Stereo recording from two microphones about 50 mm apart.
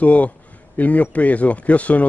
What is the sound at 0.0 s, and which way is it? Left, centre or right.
Speech, left.